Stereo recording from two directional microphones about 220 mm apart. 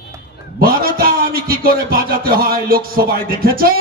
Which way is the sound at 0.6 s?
45° right (ahead or behind).